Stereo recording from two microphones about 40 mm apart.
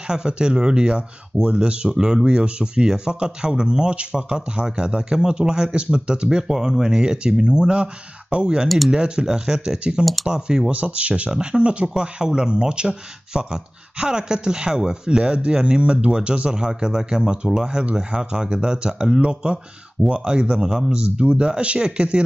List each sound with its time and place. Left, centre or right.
0.0 s speech: right
8.6 s speech: centre
8.9 s speech: right